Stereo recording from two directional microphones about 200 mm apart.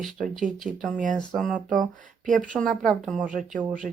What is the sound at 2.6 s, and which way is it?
Speech, centre (ahead or behind).